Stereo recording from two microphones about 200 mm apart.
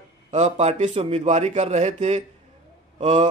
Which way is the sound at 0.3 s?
35° right (ahead or behind).